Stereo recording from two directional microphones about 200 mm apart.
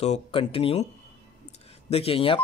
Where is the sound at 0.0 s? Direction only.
30° left (ahead or behind).